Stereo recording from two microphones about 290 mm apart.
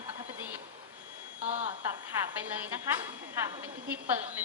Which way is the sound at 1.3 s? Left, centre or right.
Right.